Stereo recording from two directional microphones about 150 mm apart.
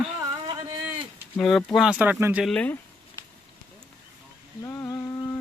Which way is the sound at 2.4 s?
10° left (ahead or behind).